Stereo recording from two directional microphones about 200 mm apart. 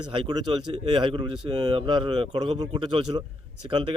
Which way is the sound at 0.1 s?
25° right (ahead or behind).